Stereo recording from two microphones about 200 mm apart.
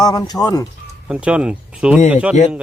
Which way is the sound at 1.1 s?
5° right (ahead or behind).